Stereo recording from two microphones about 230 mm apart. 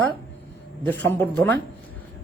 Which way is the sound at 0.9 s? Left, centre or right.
Centre.